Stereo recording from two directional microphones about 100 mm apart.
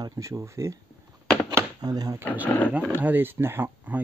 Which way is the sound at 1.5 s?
40° right (ahead or behind).